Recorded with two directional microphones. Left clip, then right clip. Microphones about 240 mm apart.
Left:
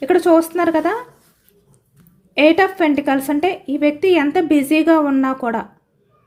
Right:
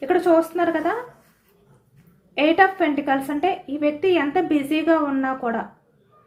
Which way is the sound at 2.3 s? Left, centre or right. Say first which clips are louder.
Left 4 dB; left.